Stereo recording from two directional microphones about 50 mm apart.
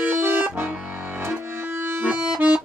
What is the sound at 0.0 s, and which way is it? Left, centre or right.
Accordion, right.